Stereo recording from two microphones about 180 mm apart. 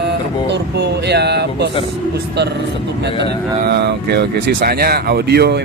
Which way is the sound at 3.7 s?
65° right (ahead or behind).